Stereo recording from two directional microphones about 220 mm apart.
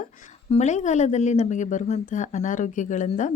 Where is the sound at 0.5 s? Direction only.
30° left (ahead or behind).